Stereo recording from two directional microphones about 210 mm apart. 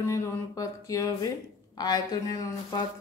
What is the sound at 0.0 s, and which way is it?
Speech, 15° left (ahead or behind).